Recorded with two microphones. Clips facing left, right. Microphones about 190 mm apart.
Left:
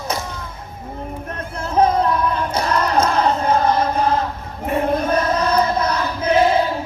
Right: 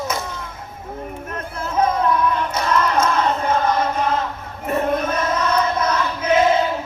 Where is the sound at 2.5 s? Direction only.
35° left (ahead or behind).